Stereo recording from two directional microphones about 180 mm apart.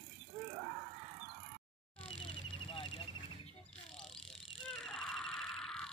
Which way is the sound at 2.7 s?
30° left (ahead or behind).